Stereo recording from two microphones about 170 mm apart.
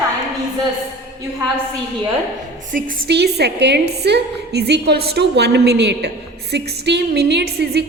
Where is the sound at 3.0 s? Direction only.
75° right (ahead or behind).